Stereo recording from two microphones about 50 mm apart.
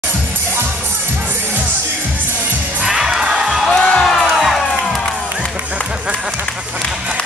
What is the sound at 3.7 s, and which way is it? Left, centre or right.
Music, centre.